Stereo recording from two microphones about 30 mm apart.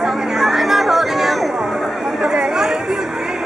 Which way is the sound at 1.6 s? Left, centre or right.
Centre.